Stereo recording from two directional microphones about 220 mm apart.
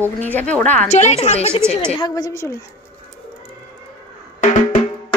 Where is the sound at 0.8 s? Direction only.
30° left (ahead or behind).